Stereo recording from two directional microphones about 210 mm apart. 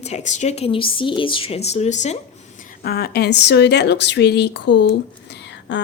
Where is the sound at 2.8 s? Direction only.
45° left (ahead or behind).